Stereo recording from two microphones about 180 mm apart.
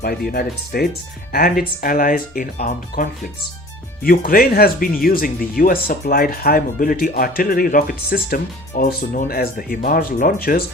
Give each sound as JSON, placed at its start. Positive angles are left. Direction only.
{"t": 0.0, "sound": "speech", "side_deg": 55}